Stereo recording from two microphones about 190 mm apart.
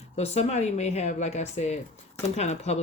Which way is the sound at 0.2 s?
35° left (ahead or behind).